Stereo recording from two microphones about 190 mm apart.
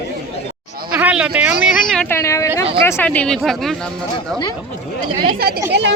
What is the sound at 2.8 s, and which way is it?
Speech, 15° left (ahead or behind).